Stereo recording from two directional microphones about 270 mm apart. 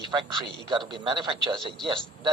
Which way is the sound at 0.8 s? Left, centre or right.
Centre.